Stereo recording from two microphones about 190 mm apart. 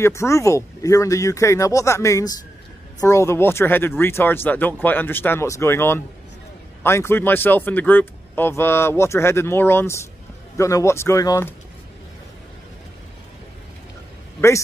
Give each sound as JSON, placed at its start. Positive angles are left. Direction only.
{"t": 0.0, "sound": "a man's voice", "side_deg": 15}